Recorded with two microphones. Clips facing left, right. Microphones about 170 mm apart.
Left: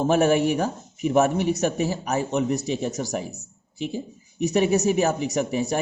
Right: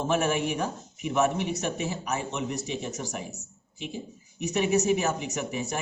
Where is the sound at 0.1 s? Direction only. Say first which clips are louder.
Left 7 dB; 40° left (ahead or behind).